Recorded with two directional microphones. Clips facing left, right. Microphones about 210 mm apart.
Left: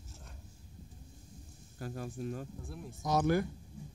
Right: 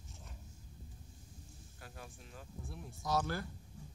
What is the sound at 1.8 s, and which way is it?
Speech, 45° left (ahead or behind).